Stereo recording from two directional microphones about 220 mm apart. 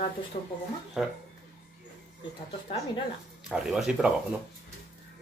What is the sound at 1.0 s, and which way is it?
Speech, centre (ahead or behind).